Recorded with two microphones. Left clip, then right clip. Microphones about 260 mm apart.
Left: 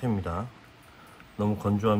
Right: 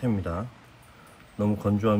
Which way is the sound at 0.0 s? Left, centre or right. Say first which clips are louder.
Right 1 dB; centre.